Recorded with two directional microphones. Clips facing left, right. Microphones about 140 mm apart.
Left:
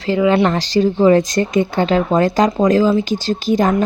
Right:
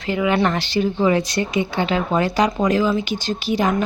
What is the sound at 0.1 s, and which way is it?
A woman's voice, 30° left (ahead or behind).